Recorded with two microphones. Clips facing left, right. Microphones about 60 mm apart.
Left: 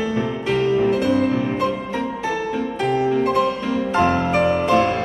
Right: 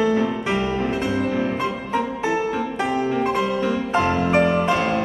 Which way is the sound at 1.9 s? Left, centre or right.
Centre.